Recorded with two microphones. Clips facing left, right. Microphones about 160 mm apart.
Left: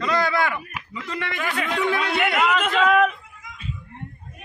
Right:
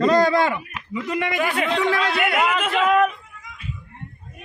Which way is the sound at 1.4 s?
30° right (ahead or behind).